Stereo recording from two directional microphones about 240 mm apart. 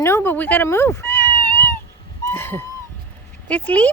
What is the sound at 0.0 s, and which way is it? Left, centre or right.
Cat, centre.